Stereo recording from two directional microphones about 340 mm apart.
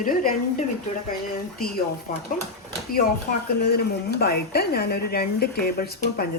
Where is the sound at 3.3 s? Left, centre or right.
Left.